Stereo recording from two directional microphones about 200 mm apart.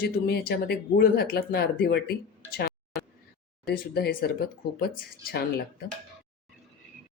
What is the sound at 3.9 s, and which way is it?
Speech, 50° left (ahead or behind).